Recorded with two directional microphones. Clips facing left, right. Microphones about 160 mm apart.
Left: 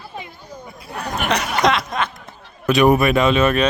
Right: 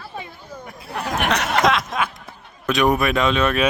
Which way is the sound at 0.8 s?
Centre (ahead or behind).